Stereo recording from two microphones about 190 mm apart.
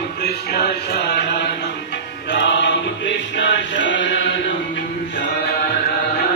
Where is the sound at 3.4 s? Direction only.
70° left (ahead or behind).